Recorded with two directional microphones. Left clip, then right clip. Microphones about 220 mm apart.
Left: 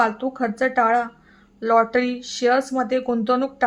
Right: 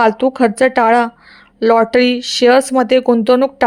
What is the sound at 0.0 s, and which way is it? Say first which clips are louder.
Speech: right 9 dB; 35° right (ahead or behind).